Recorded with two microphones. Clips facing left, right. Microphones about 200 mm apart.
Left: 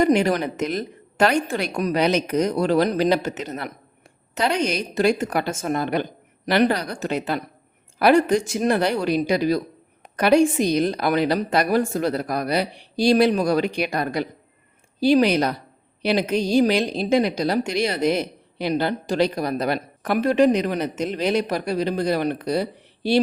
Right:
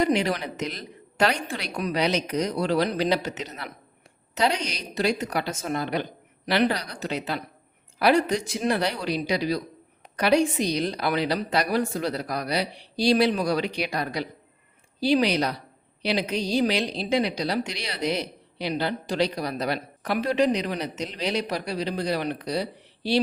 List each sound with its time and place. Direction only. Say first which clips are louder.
0.0 s a woman's voice: left 5 dB; 50° left (ahead or behind)